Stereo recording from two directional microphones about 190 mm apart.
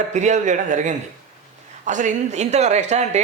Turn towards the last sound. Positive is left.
turn(degrees=-35)  # may be behind; listen again after turning